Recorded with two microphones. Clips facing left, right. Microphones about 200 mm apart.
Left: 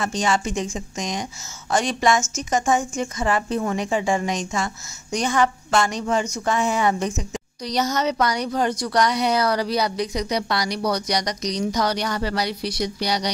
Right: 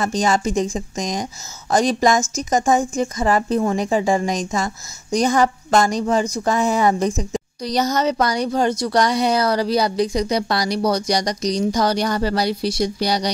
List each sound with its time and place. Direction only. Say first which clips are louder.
0.0 s a woman's voice: right 4 dB; 40° right (ahead or behind)